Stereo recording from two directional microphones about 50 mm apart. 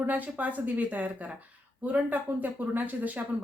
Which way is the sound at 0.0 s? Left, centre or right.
Right.